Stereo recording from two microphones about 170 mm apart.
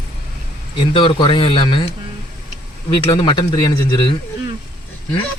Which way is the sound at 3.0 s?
25° left (ahead or behind).